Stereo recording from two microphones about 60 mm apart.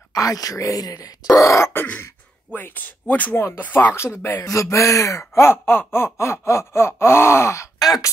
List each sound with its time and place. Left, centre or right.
0.1 s speech: left
1.3 s speech: left
2.5 s speech: left
5.3 s a sound: left
7.8 s speech: left